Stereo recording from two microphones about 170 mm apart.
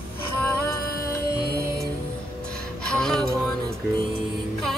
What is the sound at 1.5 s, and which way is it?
Music, 15° right (ahead or behind).